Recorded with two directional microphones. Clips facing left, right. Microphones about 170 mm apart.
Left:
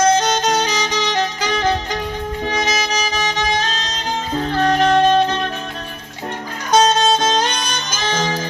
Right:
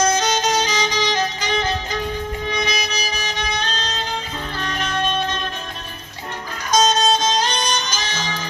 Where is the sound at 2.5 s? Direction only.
90° left.